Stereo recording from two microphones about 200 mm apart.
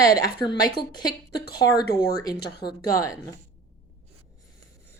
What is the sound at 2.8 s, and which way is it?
Speech, 15° left (ahead or behind).